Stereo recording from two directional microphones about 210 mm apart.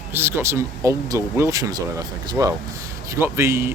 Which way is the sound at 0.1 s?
10° right (ahead or behind).